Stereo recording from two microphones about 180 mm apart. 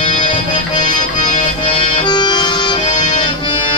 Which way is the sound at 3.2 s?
25° left (ahead or behind).